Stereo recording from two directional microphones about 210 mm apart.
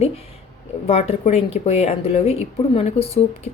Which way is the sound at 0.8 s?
30° left (ahead or behind).